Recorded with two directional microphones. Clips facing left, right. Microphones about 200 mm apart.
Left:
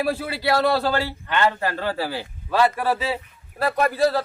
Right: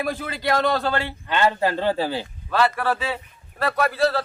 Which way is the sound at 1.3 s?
15° right (ahead or behind).